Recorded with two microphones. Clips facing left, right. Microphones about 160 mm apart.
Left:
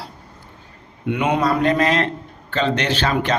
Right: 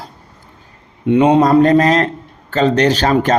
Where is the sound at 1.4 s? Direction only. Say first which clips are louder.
Right 8 dB; 40° right (ahead or behind).